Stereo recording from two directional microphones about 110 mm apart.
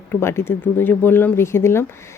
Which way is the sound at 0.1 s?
25° left (ahead or behind).